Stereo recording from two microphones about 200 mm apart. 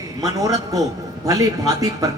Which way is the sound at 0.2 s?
15° right (ahead or behind).